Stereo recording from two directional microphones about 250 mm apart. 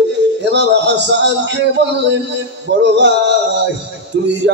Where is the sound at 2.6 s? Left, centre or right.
Right.